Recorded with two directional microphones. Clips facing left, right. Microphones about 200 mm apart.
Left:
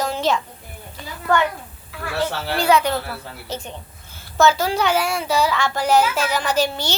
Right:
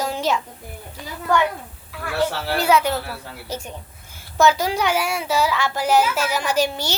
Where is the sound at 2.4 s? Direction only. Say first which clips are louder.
Left 2 dB; 5° right (ahead or behind).